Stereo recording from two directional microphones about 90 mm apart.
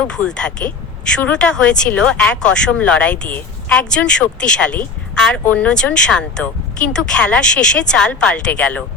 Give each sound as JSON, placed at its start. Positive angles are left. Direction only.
{"t": 0.1, "sound": "speech", "side_deg": 10}